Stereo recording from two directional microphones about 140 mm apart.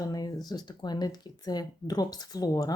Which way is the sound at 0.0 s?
25° left (ahead or behind).